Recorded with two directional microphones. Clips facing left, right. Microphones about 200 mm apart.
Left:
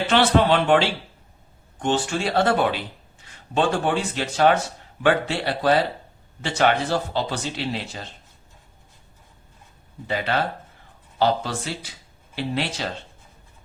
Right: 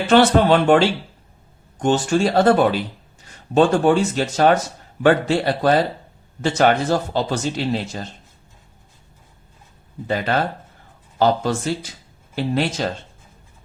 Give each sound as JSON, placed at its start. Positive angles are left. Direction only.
{"t": 0.1, "sound": "a man's voice", "side_deg": -45}
{"t": 10.1, "sound": "a man's voice", "side_deg": -45}